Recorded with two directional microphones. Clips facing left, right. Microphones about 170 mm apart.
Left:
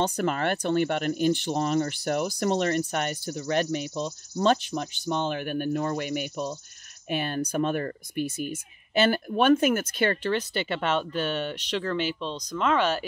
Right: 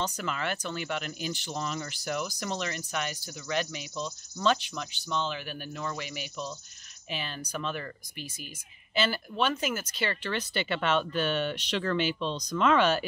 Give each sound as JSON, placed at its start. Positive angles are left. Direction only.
{"t": 0.0, "sound": "speech", "side_deg": 55}
{"t": 12.2, "sound": "speech", "side_deg": 5}
{"t": 12.5, "sound": "speech", "side_deg": 40}